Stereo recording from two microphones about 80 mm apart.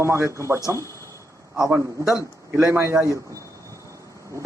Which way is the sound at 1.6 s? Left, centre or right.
Right.